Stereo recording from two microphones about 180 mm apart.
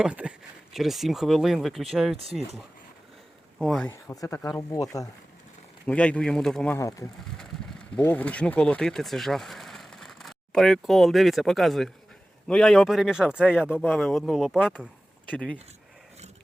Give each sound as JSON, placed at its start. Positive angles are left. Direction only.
{"t": 0.0, "sound": "a man's voice", "side_deg": -5}
{"t": 4.0, "sound": "speech", "side_deg": 20}
{"t": 5.9, "sound": "a man's voice", "side_deg": 5}
{"t": 6.7, "sound": "a man's voice", "side_deg": 15}